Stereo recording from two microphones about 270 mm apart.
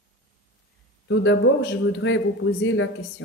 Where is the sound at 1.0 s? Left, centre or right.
Left.